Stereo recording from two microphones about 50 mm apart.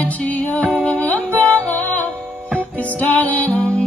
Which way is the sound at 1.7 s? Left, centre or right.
Left.